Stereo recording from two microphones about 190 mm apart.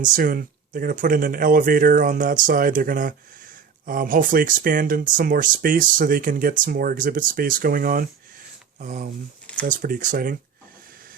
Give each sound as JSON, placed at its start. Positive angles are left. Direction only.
{"t": 0.0, "sound": "speech", "side_deg": -45}